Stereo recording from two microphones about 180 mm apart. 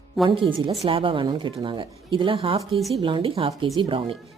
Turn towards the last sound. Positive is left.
turn(degrees=-30)  # may be behind; listen again after turning